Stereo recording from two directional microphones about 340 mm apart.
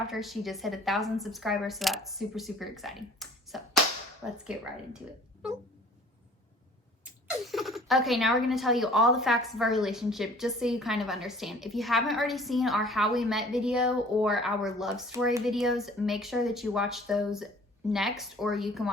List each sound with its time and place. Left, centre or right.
0.1 s speech: centre
7.0 s speech: centre